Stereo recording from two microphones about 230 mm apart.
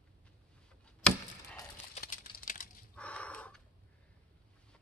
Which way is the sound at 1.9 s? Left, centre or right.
Left.